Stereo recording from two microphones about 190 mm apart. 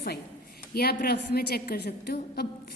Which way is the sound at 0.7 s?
55° left (ahead or behind).